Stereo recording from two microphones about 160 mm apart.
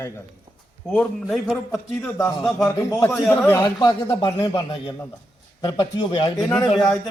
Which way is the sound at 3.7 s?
25° left (ahead or behind).